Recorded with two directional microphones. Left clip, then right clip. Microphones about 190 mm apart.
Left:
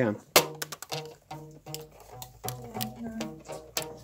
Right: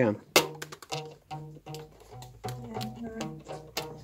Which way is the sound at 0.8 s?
5° left (ahead or behind).